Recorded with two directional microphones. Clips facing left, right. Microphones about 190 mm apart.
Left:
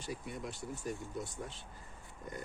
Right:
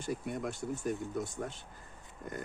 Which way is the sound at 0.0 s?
50° right (ahead or behind).